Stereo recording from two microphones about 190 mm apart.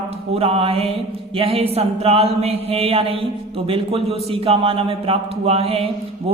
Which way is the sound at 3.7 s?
30° right (ahead or behind).